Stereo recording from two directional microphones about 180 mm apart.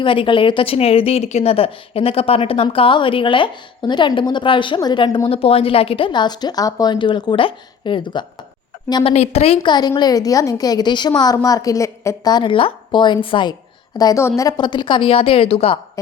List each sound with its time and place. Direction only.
0.0 s a woman's voice: 30° left (ahead or behind)
9.1 s a woman's voice: 35° left (ahead or behind)
9.6 s a woman's voice: 25° left (ahead or behind)